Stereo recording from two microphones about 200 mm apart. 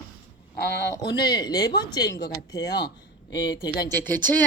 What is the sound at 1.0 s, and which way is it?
Speech, 20° left (ahead or behind).